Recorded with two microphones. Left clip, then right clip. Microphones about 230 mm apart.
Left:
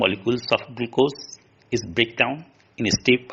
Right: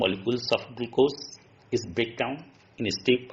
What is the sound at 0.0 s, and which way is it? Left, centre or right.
Speech, left.